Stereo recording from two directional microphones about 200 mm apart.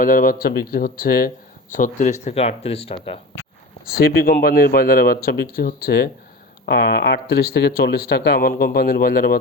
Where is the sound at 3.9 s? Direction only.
50° left (ahead or behind).